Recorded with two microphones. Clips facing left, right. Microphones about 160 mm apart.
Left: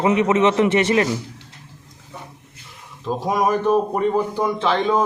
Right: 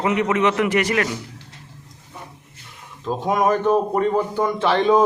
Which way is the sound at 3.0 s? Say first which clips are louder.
Right 1 dB; 5° left (ahead or behind).